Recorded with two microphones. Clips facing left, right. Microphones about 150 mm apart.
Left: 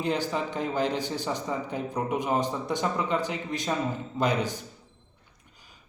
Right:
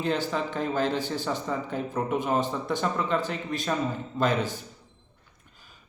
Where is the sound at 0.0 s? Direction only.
15° left (ahead or behind).